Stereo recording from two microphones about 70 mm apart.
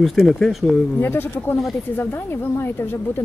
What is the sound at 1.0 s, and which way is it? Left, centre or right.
Speech, left.